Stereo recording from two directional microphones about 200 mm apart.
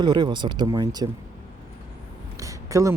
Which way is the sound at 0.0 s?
20° right (ahead or behind).